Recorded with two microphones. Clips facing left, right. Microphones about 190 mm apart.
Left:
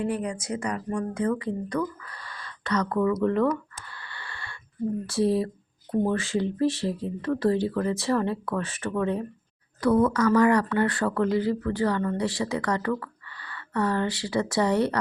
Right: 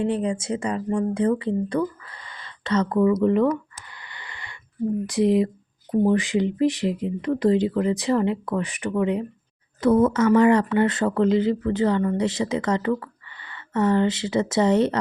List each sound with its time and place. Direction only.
0.0 s speech: 25° right (ahead or behind)
3.8 s a sound: 20° right (ahead or behind)
5.0 s speech: 15° right (ahead or behind)